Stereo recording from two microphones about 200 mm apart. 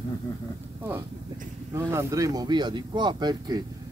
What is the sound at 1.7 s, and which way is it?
Speech, 15° right (ahead or behind).